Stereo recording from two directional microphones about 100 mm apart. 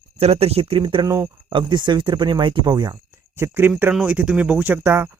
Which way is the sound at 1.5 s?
50° right (ahead or behind).